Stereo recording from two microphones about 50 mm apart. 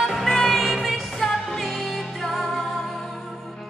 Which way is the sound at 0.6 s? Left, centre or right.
Centre.